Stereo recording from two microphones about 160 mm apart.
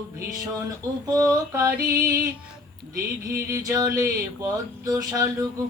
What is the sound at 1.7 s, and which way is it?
Music, 65° right (ahead or behind).